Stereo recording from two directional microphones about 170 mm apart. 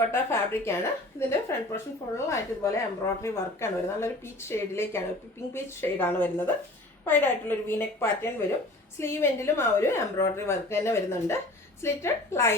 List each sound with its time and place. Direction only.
0.1 s a woman's voice: 15° left (ahead or behind)